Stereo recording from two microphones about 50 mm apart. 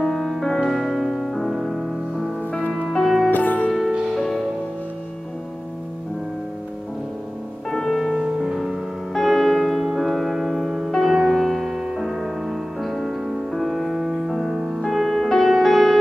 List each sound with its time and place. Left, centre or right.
0.0 s music: centre
3.3 s music: left
4.1 s music: centre
7.7 s music: centre